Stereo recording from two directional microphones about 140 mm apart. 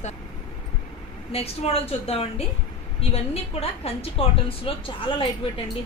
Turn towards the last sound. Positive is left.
turn(degrees=40)  # may be behind; listen again after turning